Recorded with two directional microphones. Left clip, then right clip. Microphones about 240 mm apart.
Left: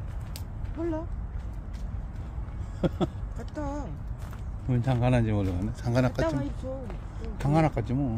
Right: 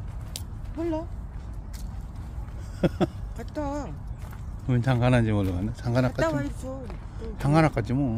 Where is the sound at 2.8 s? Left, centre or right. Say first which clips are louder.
Right 3 dB; right.